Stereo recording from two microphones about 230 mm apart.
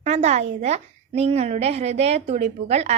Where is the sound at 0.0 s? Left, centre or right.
Right.